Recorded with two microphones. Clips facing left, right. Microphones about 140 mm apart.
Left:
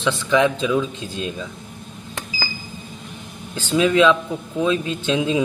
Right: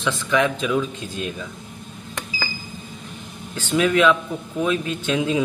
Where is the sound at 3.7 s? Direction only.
20° left (ahead or behind).